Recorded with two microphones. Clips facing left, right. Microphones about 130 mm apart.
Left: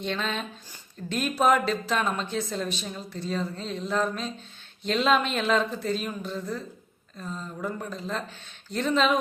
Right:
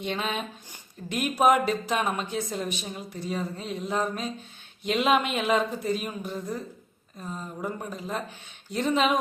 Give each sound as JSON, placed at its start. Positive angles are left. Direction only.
{"t": 0.0, "sound": "speech", "side_deg": -10}